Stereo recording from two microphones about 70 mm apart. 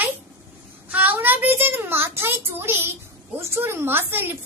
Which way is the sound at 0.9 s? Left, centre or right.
Right.